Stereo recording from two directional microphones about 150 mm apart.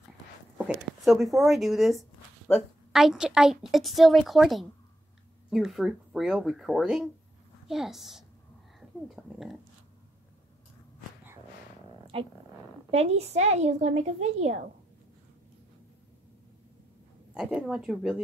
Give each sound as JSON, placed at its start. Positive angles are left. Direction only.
{"t": 0.6, "sound": "speech", "side_deg": 0}
{"t": 8.7, "sound": "a sound", "side_deg": 0}
{"t": 12.1, "sound": "a woman's voice", "side_deg": -40}
{"t": 17.3, "sound": "speech", "side_deg": -5}